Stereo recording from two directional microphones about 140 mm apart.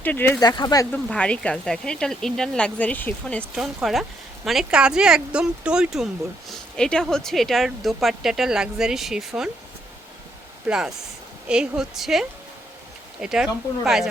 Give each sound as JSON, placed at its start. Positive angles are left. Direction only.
{"t": 0.0, "sound": "speech", "side_deg": 15}
{"t": 0.3, "sound": "speech", "side_deg": 30}
{"t": 1.0, "sound": "speech", "side_deg": 5}
{"t": 3.5, "sound": "speech", "side_deg": -5}
{"t": 10.7, "sound": "speech", "side_deg": -5}
{"t": 13.2, "sound": "speech", "side_deg": -5}